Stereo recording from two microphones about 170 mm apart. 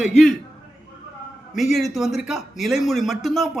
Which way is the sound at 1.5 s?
Centre (ahead or behind).